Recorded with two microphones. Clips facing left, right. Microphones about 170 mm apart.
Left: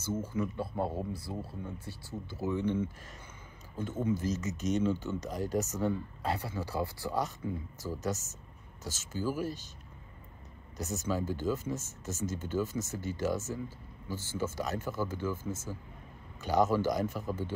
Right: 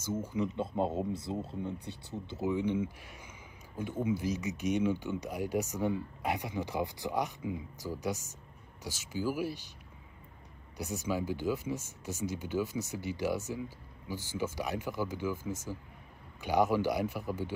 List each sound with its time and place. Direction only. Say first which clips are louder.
0.2 s speech: right 1 dB; 15° right (ahead or behind)
10.8 s speech: even; 10° right (ahead or behind)